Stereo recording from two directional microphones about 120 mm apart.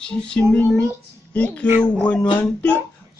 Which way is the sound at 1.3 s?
10° left (ahead or behind).